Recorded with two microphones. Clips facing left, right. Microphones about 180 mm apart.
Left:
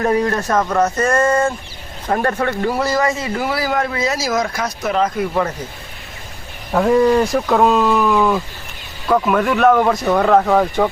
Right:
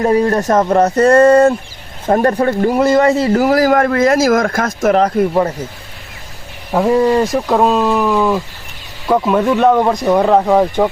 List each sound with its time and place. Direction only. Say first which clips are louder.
0.0 s speech: right 4 dB; 30° right (ahead or behind)
2.6 s speech: right 7 dB; 15° right (ahead or behind)
2.9 s speech: right 8 dB; 30° right (ahead or behind)
6.7 s speech: right 1 dB; 10° right (ahead or behind)
8.1 s a sound: right 1 dB; 5° right (ahead or behind)
9.0 s speech: right 3 dB; 15° right (ahead or behind)